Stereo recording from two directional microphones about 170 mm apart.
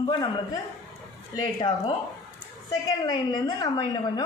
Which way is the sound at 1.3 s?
20° left (ahead or behind).